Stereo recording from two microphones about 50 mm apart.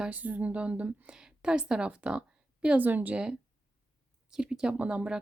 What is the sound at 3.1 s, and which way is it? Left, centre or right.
A woman's voice, centre.